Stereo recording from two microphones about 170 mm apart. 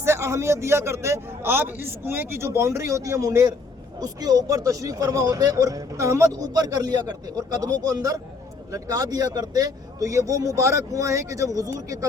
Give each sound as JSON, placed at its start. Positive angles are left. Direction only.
{"t": 0.0, "sound": "a man's voice", "side_deg": -15}